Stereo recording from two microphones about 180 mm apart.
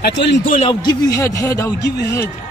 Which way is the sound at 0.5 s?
35° left (ahead or behind).